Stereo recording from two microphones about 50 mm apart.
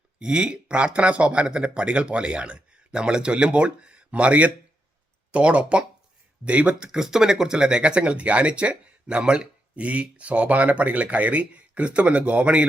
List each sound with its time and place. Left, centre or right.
0.2 s speech: centre